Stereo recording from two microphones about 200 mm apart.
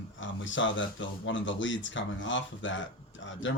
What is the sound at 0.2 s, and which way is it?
Speech, 70° left (ahead or behind).